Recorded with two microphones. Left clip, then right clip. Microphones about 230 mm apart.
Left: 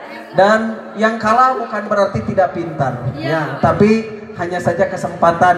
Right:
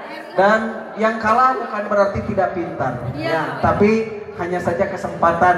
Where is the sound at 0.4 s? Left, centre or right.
Left.